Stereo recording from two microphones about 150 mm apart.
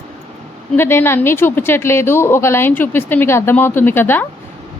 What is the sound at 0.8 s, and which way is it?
A woman's voice, 15° left (ahead or behind).